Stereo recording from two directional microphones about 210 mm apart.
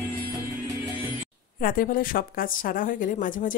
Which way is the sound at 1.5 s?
40° left (ahead or behind).